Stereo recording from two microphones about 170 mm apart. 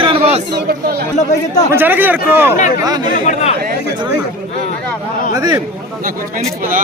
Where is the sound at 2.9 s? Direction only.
25° right (ahead or behind).